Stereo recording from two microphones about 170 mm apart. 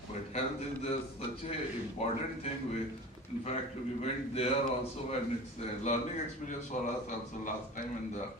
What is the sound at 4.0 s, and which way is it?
Speech, 35° left (ahead or behind).